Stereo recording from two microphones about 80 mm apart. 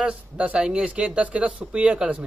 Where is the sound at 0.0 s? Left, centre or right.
Centre.